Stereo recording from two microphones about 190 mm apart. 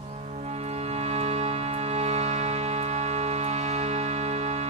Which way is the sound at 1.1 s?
35° right (ahead or behind).